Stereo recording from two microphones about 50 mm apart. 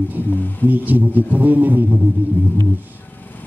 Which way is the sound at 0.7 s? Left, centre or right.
Right.